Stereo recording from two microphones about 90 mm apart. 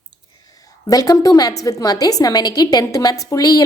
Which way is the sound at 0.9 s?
45° left (ahead or behind).